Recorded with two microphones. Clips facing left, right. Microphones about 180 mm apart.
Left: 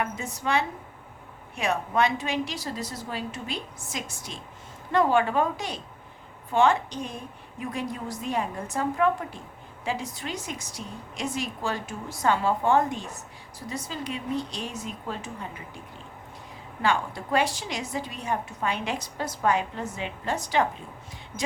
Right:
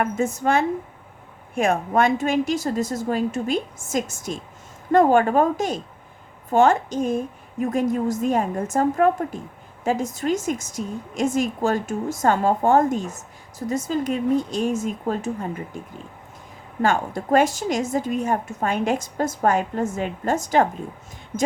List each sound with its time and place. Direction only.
0.0 s a woman's voice: 45° right (ahead or behind)
16.8 s a woman's voice: 45° right (ahead or behind)